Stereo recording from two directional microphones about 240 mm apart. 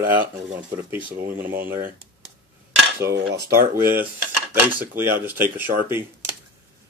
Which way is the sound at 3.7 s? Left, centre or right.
Centre.